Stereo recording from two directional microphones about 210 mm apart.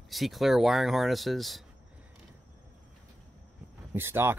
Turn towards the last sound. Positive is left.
turn(degrees=-10)  # may be behind; listen again after turning